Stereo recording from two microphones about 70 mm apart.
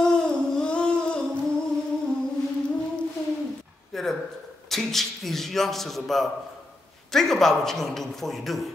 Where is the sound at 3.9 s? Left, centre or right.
Centre.